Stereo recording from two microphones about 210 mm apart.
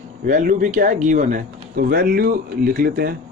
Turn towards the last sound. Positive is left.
turn(degrees=-45)  # may be behind; listen again after turning